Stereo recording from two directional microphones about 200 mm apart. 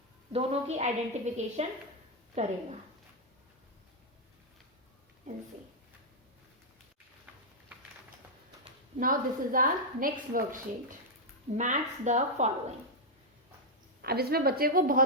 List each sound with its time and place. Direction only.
0.3 s a woman's voice: 35° right (ahead or behind)
9.0 s a woman's voice: 45° right (ahead or behind)
14.0 s a woman's voice: 50° right (ahead or behind)